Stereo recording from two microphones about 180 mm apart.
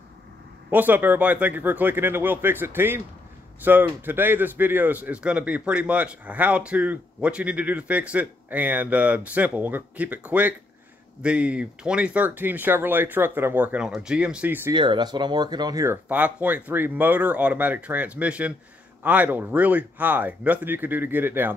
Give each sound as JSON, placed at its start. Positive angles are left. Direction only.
{"t": 0.7, "sound": "speech", "side_deg": -10}
{"t": 14.7, "sound": "speech", "side_deg": -25}